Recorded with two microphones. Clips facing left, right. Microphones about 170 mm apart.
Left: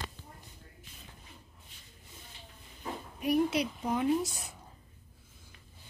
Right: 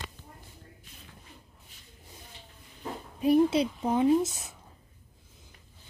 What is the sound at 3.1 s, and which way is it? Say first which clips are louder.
A woman's voice: right 6 dB; 30° right (ahead or behind).